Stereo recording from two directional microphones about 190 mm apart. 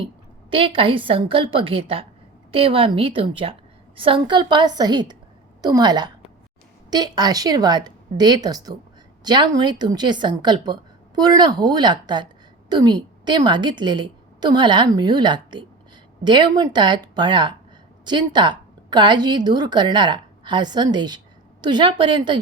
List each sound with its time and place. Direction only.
0.5 s a woman's voice: 30° right (ahead or behind)